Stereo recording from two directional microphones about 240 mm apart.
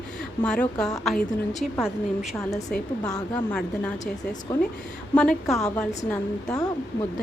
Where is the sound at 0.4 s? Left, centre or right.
Centre.